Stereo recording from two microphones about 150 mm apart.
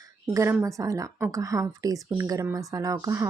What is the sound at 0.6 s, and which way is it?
Speech, 20° right (ahead or behind).